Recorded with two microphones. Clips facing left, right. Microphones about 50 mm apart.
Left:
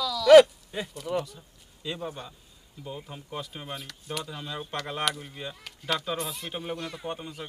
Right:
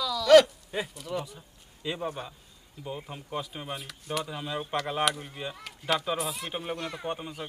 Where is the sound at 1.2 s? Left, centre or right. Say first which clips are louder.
Left 4 dB; centre.